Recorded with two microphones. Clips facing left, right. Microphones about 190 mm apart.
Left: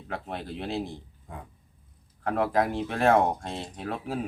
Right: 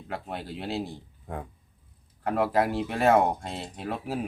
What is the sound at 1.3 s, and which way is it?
Speech, 60° right (ahead or behind).